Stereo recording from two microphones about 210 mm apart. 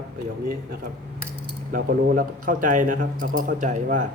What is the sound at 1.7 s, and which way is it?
A man's voice, 40° right (ahead or behind).